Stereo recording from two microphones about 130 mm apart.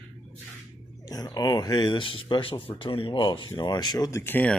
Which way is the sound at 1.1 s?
30° left (ahead or behind).